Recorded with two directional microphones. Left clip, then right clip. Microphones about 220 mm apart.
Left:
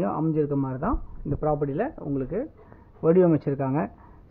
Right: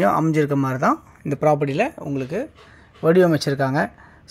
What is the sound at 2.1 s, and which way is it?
Speech, 15° right (ahead or behind).